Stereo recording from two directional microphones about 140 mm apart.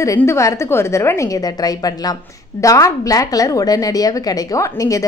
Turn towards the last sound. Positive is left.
turn(degrees=25)  # may be behind; listen again after turning